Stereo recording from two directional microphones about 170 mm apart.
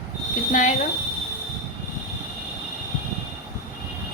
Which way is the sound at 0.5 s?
45° left (ahead or behind).